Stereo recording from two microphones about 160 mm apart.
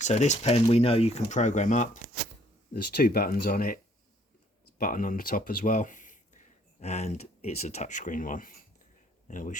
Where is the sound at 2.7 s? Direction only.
75° left (ahead or behind).